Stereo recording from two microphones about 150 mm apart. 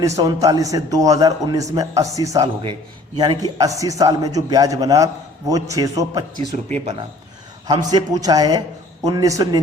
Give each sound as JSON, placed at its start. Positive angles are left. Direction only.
{"t": 0.2, "sound": "a man's voice", "side_deg": -25}
{"t": 7.7, "sound": "a man's voice", "side_deg": -25}